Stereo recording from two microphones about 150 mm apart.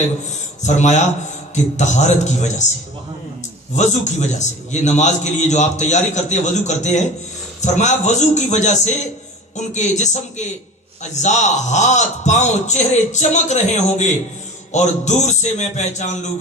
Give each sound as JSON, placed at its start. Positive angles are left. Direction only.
{"t": 0.6, "sound": "a man's voice", "side_deg": 50}
{"t": 3.8, "sound": "a man's voice", "side_deg": 50}